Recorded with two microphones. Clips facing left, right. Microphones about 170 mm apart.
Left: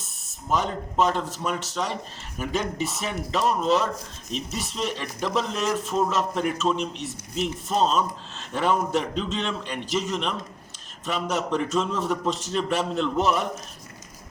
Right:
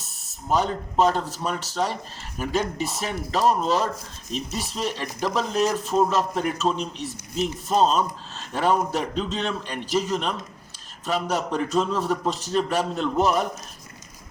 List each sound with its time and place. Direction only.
0.5 s speech: 35° right (ahead or behind)
8.5 s speech: 35° right (ahead or behind)